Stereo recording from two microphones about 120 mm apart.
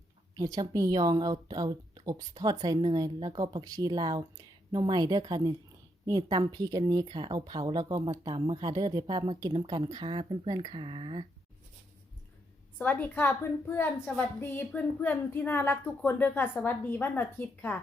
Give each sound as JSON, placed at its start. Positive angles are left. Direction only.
{"t": 0.3, "sound": "a woman's voice", "side_deg": -30}
{"t": 9.6, "sound": "a woman's voice", "side_deg": -35}
{"t": 12.8, "sound": "a woman's voice", "side_deg": 15}